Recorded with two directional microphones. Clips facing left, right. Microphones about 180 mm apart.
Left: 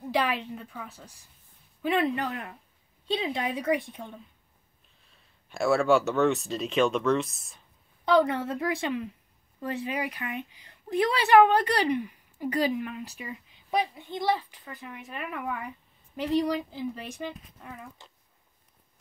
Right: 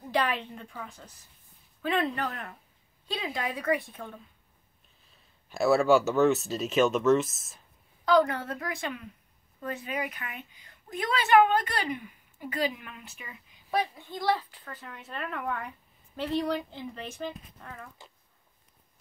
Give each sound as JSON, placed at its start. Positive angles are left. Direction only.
{"t": 0.1, "sound": "a woman's voice", "side_deg": 10}
{"t": 3.1, "sound": "a woman's voice", "side_deg": 25}
{"t": 5.0, "sound": "speech", "side_deg": 0}
{"t": 8.0, "sound": "a woman's voice", "side_deg": 25}
{"t": 13.7, "sound": "a woman's voice", "side_deg": 20}